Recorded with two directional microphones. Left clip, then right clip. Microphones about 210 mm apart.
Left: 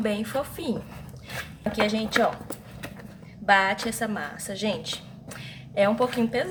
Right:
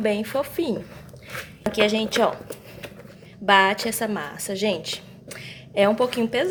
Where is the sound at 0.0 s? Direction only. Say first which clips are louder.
Right 4 dB; 25° right (ahead or behind).